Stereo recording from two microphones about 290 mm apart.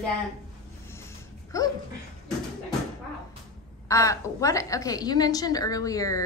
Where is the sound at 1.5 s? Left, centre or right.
Centre.